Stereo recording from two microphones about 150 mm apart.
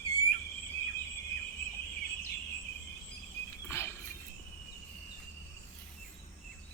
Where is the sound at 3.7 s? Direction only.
15° left (ahead or behind).